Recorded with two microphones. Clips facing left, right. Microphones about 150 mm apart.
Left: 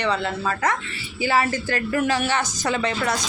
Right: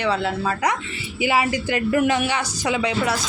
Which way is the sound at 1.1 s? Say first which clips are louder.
Right 1 dB; 15° right (ahead or behind).